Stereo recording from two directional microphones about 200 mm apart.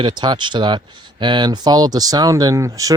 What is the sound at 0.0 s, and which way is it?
Speech, 20° right (ahead or behind).